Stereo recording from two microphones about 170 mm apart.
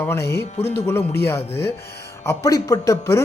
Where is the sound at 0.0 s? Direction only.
15° left (ahead or behind).